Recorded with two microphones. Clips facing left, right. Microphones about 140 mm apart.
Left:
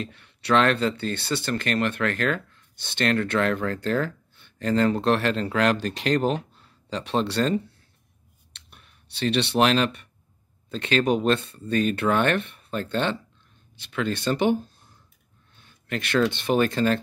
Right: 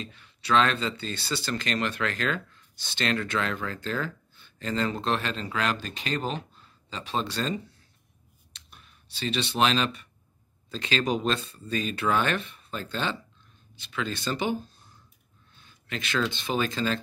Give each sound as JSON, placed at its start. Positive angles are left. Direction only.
{"t": 0.0, "sound": "speech", "side_deg": 65}